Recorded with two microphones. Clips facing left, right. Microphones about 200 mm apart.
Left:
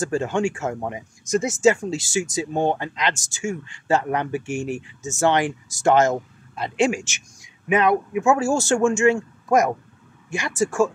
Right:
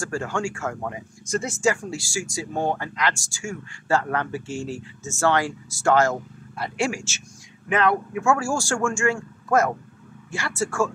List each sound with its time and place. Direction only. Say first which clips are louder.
0.0 s speech: left 5 dB; 20° left (ahead or behind)